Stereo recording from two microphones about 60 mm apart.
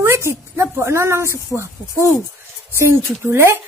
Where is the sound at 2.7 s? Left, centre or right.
Right.